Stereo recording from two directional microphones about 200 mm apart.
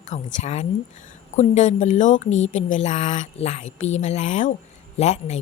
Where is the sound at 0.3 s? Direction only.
35° left (ahead or behind).